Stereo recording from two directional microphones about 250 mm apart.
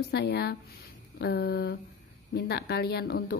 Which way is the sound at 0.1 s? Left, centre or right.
Left.